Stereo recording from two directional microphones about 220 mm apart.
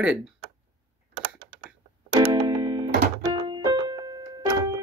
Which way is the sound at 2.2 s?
20° right (ahead or behind).